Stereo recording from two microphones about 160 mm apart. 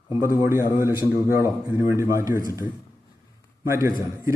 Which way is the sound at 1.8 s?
15° right (ahead or behind).